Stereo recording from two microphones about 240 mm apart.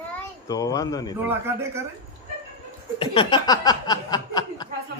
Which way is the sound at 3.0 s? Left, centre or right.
Left.